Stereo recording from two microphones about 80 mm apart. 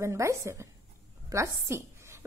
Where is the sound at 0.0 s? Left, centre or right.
Right.